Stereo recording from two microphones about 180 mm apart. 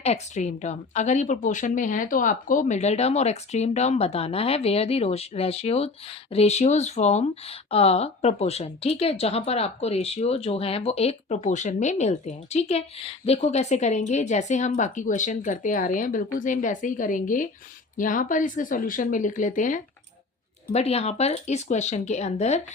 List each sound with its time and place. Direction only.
0.0 s speech: 40° left (ahead or behind)
20.7 s speech: 35° left (ahead or behind)